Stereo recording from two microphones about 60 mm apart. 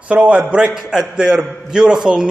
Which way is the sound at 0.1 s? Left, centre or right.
Centre.